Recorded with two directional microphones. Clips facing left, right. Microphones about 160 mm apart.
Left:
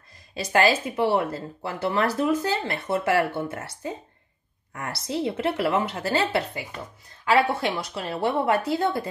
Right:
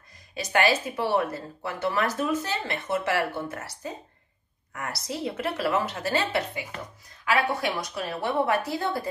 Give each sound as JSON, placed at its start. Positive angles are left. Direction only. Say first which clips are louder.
{"t": 0.3, "sound": "speech", "louder": "left 2 dB", "side_deg": 30}